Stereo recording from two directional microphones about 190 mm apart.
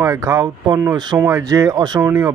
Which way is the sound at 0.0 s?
15° right (ahead or behind).